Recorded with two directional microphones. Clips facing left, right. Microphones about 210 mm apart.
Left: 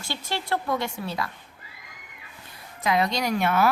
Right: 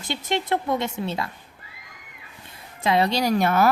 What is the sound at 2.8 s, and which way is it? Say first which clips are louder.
Speech: right 3 dB; 30° right (ahead or behind).